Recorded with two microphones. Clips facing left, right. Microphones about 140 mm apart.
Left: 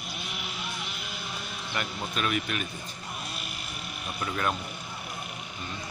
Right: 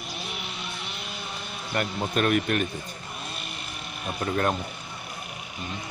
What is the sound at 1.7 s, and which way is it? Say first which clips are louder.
Speech: right 7 dB; 50° right (ahead or behind).